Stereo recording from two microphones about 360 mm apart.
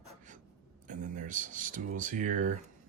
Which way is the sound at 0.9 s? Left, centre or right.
Right.